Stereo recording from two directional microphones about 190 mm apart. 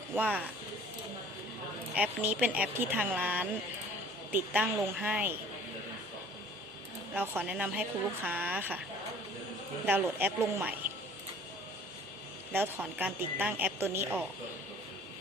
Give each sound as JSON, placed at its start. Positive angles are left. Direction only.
{"t": 0.1, "sound": "a woman's voice", "side_deg": -10}
{"t": 2.0, "sound": "a woman's voice", "side_deg": -10}
{"t": 7.1, "sound": "a woman's voice", "side_deg": -5}
{"t": 9.8, "sound": "a woman's voice", "side_deg": -10}
{"t": 12.5, "sound": "a woman's voice", "side_deg": -10}